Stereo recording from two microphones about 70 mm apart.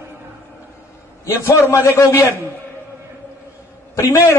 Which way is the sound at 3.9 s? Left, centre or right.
Left.